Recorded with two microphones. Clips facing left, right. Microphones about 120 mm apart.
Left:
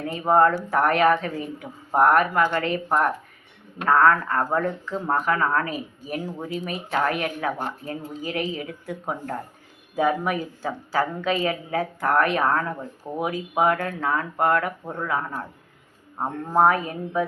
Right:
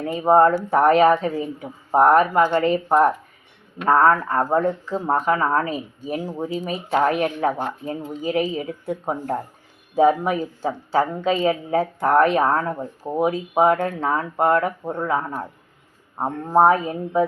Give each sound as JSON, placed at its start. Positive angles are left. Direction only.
{"t": 0.1, "sound": "a woman's voice", "side_deg": -20}